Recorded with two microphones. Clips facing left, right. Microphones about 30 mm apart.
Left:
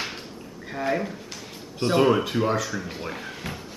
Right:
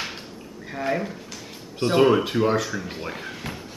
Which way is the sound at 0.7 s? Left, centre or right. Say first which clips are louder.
Even; centre.